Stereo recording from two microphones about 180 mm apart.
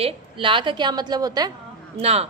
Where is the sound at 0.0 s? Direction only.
30° right (ahead or behind).